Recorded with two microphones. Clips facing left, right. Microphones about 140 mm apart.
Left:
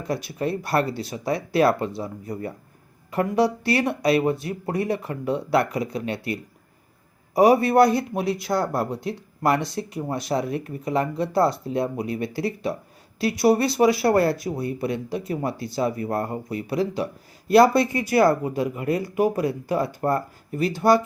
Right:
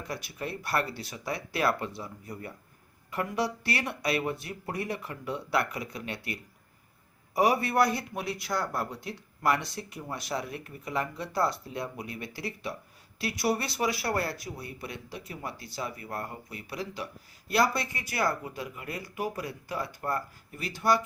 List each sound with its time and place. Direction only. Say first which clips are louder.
0.1 s speech: left 12 dB; 30° left (ahead or behind)